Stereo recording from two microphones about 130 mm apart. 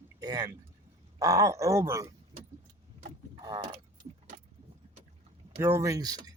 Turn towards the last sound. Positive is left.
turn(degrees=-25)  # may be behind; listen again after turning